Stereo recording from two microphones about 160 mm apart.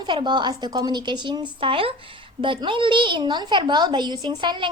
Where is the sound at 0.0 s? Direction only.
30° right (ahead or behind).